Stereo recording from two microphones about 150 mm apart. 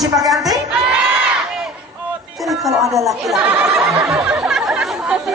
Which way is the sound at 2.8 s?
20° right (ahead or behind).